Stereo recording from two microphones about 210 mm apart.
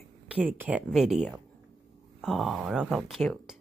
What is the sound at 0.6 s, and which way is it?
Speech, 5° right (ahead or behind).